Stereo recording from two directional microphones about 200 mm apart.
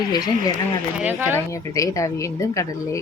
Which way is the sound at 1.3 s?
15° left (ahead or behind).